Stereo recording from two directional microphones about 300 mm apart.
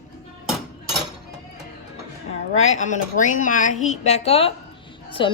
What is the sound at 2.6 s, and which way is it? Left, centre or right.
A woman's voice, left.